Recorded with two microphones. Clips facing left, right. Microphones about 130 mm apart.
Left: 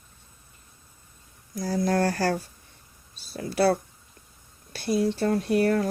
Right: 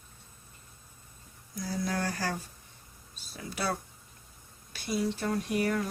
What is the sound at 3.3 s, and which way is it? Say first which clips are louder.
Speech: left 12 dB; 40° left (ahead or behind).